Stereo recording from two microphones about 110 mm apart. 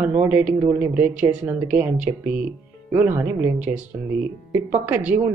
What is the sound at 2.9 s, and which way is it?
Speech, 20° right (ahead or behind).